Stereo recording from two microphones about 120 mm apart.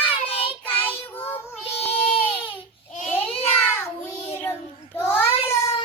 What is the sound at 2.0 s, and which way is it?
Baby cry, 45° left (ahead or behind).